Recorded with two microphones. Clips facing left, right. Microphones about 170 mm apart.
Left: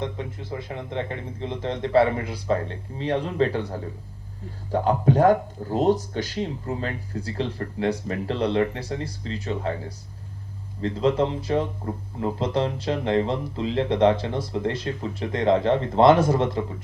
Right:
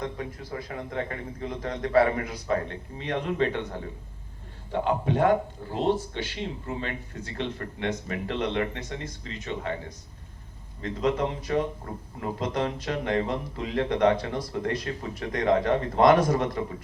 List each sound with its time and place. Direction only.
0.0 s a man's voice: 25° left (ahead or behind)
10.8 s a man's voice: 30° left (ahead or behind)